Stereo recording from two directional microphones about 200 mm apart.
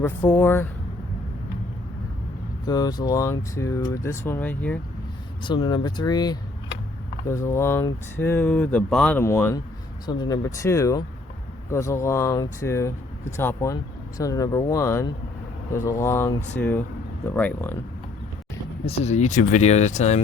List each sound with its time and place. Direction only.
0.0 s speech: 10° left (ahead or behind)
2.6 s speech: 20° left (ahead or behind)
5.4 s speech: 20° left (ahead or behind)
18.9 s speech: 30° left (ahead or behind)